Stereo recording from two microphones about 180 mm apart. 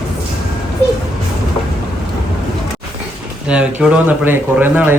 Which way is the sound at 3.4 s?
5° right (ahead or behind).